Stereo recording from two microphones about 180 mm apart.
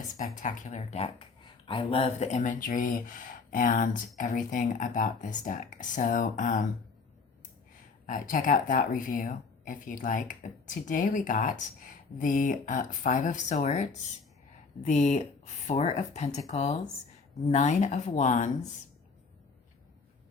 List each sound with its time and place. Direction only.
0.3 s speech: 45° left (ahead or behind)
8.0 s speech: 45° left (ahead or behind)